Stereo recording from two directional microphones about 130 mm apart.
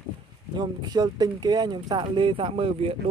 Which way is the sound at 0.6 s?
35° right (ahead or behind).